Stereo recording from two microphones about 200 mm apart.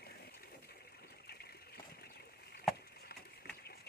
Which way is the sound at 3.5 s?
50° left (ahead or behind).